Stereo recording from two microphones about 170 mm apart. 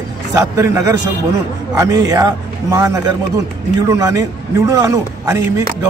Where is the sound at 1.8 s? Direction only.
20° right (ahead or behind).